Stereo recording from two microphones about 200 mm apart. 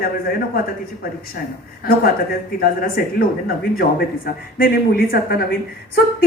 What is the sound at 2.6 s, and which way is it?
Speech, 50° left (ahead or behind).